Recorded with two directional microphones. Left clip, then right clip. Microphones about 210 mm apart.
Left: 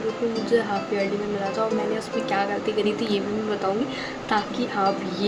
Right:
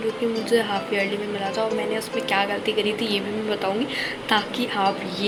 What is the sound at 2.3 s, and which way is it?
Speech, 5° left (ahead or behind).